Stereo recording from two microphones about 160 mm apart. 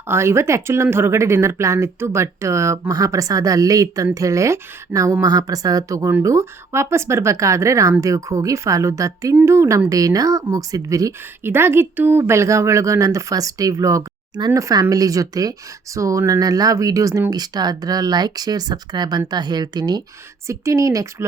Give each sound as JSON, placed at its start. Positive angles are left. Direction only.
{"t": 0.1, "sound": "a woman's voice", "side_deg": -15}